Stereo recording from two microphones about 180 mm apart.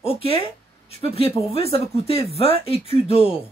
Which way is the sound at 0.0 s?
30° left (ahead or behind).